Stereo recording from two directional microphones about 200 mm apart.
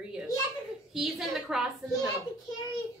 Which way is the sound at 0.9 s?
Centre (ahead or behind).